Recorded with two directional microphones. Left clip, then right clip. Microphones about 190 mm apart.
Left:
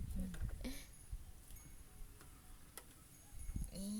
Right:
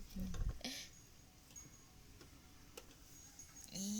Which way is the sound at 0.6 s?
25° left (ahead or behind).